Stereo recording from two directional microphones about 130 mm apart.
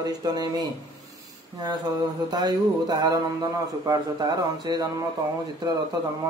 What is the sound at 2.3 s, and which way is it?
A man's voice, 30° right (ahead or behind).